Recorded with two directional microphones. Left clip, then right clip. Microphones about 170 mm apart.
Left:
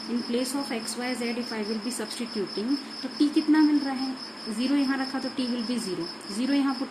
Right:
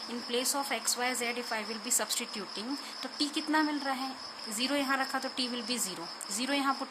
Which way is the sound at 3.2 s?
50° right (ahead or behind).